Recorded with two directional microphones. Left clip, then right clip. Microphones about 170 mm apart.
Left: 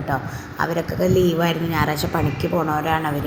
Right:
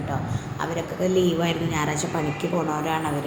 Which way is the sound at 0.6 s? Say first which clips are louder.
Left 5 dB; 20° left (ahead or behind).